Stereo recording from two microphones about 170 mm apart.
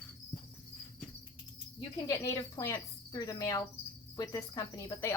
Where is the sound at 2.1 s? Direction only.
20° left (ahead or behind).